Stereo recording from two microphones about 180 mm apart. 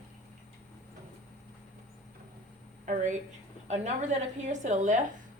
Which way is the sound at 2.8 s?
45° right (ahead or behind).